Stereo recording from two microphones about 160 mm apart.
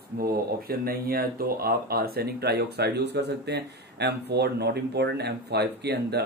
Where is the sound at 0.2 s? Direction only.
70° right (ahead or behind).